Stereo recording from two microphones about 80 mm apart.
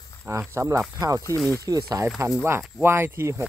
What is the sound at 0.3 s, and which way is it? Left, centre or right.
Speech, right.